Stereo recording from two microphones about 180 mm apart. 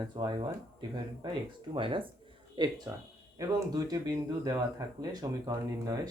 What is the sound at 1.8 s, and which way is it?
Speech, 30° right (ahead or behind).